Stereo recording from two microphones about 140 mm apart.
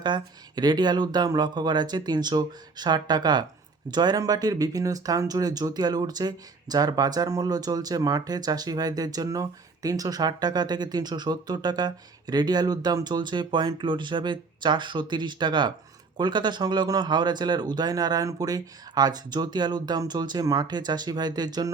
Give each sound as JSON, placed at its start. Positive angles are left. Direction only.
{"t": 0.0, "sound": "speech", "side_deg": -30}